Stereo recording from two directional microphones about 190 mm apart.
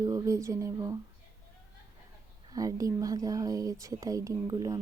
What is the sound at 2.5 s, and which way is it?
Speech, 20° right (ahead or behind).